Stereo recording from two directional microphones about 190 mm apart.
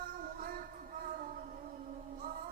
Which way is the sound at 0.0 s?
50° right (ahead or behind).